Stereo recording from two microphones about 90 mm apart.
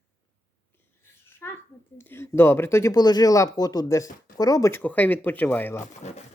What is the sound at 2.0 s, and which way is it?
Speech, 30° left (ahead or behind).